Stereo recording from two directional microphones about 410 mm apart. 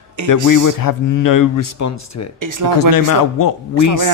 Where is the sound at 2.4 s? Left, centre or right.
Right.